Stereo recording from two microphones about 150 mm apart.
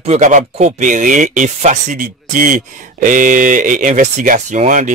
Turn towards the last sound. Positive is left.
turn(degrees=-55)  # may be behind; listen again after turning